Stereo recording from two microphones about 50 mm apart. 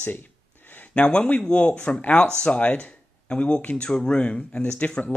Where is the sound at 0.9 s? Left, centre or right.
Centre.